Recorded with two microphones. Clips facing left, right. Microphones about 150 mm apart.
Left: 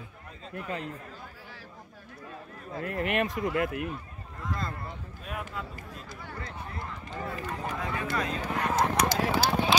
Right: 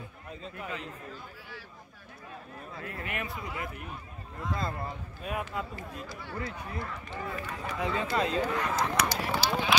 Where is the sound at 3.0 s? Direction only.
70° left (ahead or behind).